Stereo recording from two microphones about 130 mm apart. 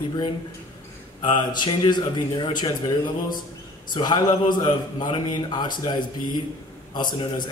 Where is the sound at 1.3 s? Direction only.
35° left (ahead or behind).